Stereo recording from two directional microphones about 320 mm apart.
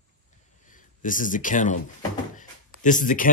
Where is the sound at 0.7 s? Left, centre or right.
Left.